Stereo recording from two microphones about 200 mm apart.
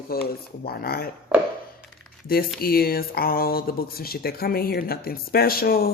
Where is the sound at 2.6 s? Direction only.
50° left (ahead or behind).